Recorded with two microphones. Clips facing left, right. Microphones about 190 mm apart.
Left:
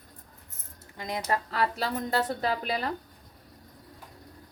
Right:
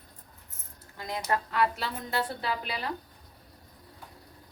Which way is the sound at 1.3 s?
35° left (ahead or behind).